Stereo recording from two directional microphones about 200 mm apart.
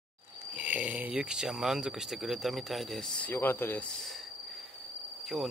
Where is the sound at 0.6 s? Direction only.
5° right (ahead or behind).